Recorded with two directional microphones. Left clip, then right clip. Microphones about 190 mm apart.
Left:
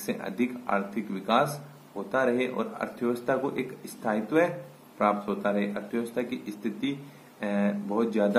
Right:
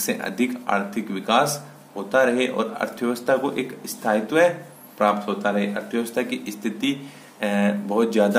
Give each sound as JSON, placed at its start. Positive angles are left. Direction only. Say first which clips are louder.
{"t": 0.0, "sound": "speech", "louder": "right 6 dB", "side_deg": -15}